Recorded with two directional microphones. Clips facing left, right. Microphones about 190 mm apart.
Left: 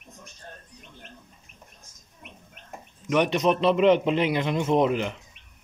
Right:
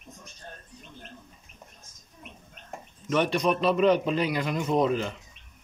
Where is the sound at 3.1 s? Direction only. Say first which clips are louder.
Left 2 dB; 20° left (ahead or behind).